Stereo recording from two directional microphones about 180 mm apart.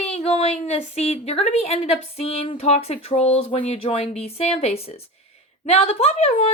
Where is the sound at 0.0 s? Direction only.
35° left (ahead or behind).